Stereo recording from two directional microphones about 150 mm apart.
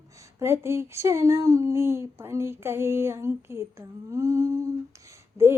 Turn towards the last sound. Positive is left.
turn(degrees=-15)  # may be behind; listen again after turning